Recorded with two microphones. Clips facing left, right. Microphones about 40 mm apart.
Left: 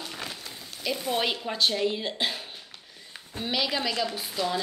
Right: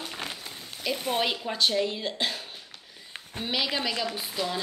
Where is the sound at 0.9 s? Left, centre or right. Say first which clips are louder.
Even; right.